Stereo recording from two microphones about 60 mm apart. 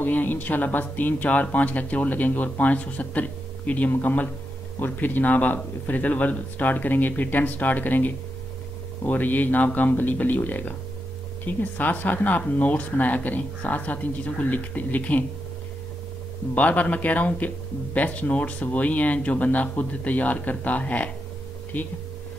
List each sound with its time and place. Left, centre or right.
0.0 s speech: left
16.5 s speech: left